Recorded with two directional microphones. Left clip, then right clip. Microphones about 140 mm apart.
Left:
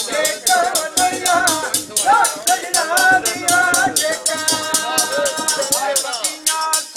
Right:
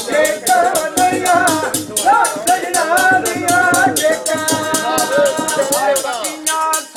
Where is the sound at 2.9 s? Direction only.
10° right (ahead or behind).